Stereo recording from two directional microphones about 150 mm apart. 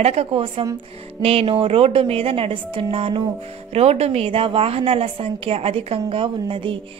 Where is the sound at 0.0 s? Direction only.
40° right (ahead or behind).